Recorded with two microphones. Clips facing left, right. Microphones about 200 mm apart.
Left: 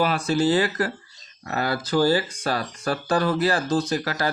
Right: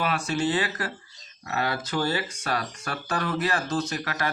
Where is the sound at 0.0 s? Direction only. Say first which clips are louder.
Left 5 dB; 35° left (ahead or behind).